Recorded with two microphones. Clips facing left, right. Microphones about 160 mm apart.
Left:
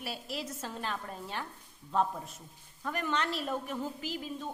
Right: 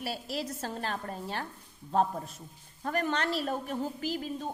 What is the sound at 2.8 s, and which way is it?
A woman's voice, 40° right (ahead or behind).